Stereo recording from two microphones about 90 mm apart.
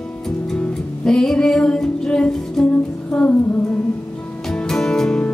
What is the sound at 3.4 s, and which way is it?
Humming, 20° left (ahead or behind).